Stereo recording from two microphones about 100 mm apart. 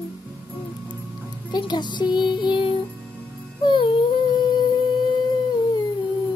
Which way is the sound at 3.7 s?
55° left (ahead or behind).